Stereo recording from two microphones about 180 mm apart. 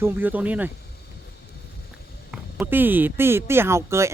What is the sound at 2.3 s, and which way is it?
Speech, 10° right (ahead or behind).